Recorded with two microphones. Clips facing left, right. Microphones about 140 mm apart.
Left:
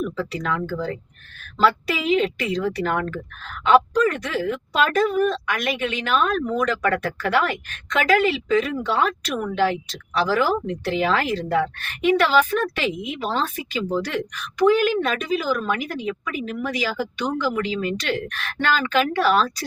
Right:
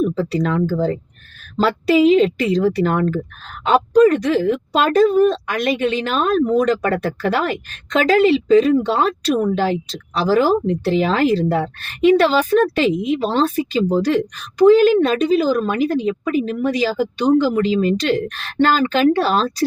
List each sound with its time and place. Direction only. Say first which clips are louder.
0.0 s a woman's voice: right 8 dB; 35° right (ahead or behind)